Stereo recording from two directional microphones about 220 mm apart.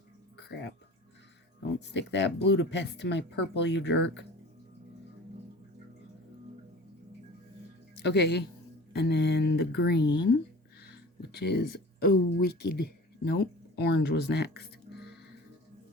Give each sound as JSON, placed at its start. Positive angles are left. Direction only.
{"t": 0.3, "sound": "a sound", "side_deg": 50}
{"t": 1.9, "sound": "speech", "side_deg": 50}
{"t": 8.0, "sound": "speech", "side_deg": 50}